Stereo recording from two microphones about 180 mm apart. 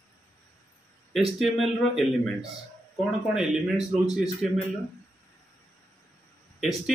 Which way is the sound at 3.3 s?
5° right (ahead or behind).